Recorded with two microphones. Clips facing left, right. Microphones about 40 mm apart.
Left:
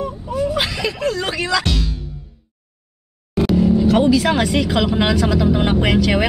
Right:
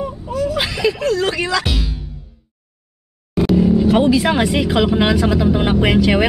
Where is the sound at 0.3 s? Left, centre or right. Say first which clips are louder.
Even; centre.